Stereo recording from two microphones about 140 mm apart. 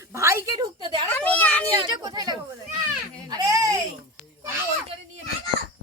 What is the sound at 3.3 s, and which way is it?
Baby cry, 25° right (ahead or behind).